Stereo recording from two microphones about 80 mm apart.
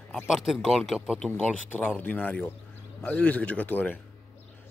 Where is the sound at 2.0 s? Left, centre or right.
Left.